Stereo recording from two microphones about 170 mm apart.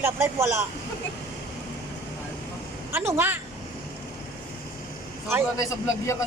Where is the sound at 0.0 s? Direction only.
15° right (ahead or behind).